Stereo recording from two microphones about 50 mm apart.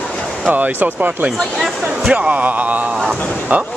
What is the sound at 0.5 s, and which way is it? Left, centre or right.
Speech, right.